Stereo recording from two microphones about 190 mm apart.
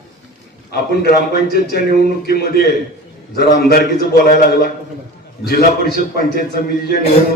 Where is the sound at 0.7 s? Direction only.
55° left (ahead or behind).